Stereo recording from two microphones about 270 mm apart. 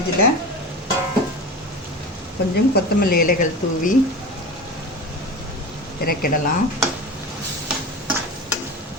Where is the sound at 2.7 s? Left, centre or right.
Left.